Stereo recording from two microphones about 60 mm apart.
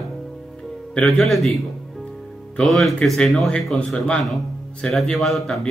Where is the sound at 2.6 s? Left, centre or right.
Centre.